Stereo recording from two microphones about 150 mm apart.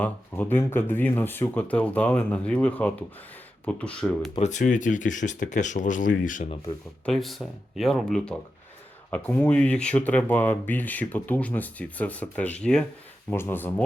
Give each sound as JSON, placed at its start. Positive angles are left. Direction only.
{"t": 0.0, "sound": "speech", "side_deg": 10}
{"t": 4.4, "sound": "speech", "side_deg": 50}
{"t": 7.0, "sound": "speech", "side_deg": 0}